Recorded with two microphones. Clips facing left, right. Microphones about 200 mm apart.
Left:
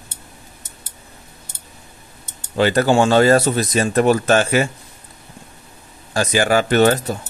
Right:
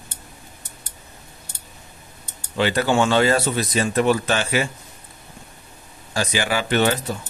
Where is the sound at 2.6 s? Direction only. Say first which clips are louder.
Left 4 dB; 45° left (ahead or behind).